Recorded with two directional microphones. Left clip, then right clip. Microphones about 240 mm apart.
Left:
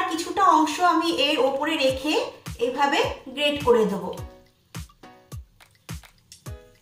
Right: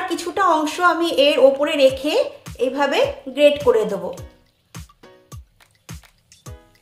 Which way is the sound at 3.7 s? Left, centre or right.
Right.